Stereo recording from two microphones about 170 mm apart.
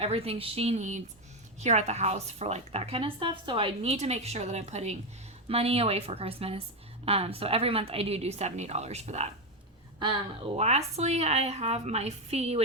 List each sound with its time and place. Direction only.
0.0 s a woman's voice: 35° right (ahead or behind)
10.6 s a woman's voice: 40° right (ahead or behind)